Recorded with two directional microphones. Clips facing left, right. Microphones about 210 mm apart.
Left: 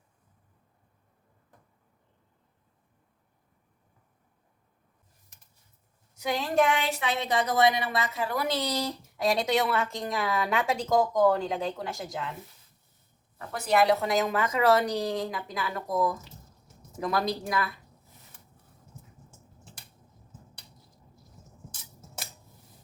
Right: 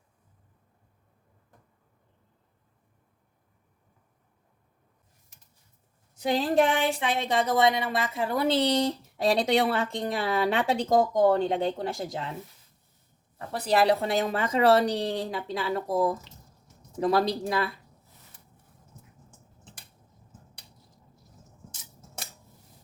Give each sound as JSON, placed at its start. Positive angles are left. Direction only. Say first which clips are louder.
{"t": 6.1, "sound": "speech", "louder": "right 3 dB", "side_deg": -30}
{"t": 13.5, "sound": "a woman's voice", "louder": "right 1 dB", "side_deg": -35}